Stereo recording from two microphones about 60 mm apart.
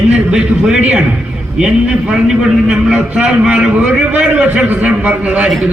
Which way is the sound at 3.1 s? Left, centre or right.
Centre.